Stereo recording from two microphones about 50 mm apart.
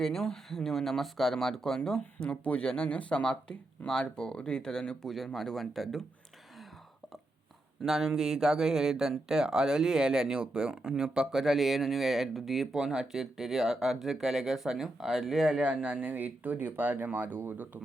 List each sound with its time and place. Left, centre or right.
0.0 s speech: centre
7.9 s speech: centre
15.5 s speech: right